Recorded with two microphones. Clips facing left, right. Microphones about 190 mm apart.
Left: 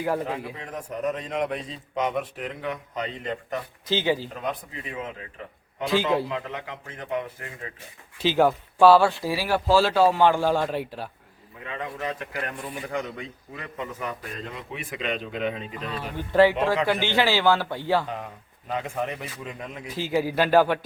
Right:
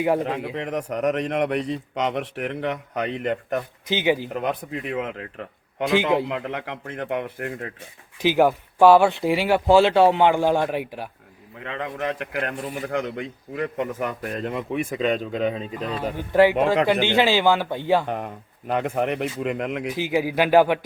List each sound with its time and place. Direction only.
0.5 s a man's voice: 75° right (ahead or behind)
3.8 s speech: 15° right (ahead or behind)
4.4 s a man's voice: 70° right (ahead or behind)
5.9 s a man's voice: 20° right (ahead or behind)
6.5 s a man's voice: 65° right (ahead or behind)
8.2 s speech: 15° right (ahead or behind)
11.6 s a man's voice: 65° right (ahead or behind); by 16.0 s 35° right (ahead or behind)
16.3 s speech: 15° right (ahead or behind)
18.0 s a man's voice: 60° right (ahead or behind)
20.0 s speech: 10° right (ahead or behind)